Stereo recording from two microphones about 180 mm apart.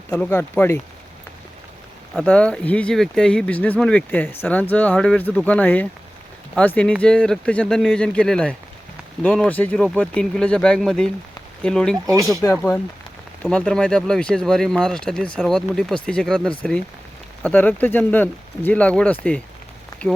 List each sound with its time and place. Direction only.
0.1 s speech: 10° left (ahead or behind)
2.1 s speech: 5° left (ahead or behind)
12.0 s speech: 20° right (ahead or behind)
12.4 s speech: 15° left (ahead or behind)
13.4 s speech: 5° left (ahead or behind)
19.9 s a sound: 20° left (ahead or behind)